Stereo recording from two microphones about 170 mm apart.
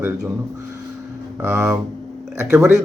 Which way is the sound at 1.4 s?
15° right (ahead or behind).